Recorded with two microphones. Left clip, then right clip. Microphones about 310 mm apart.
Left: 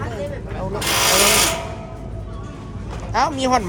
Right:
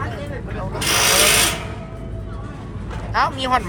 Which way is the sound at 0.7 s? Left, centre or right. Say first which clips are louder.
Right 1 dB; left.